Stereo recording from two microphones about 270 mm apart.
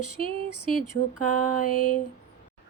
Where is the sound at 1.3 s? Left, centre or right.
Left.